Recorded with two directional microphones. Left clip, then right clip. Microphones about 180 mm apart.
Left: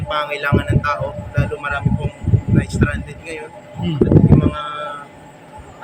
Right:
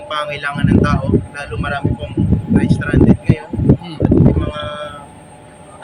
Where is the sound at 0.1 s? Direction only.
10° left (ahead or behind).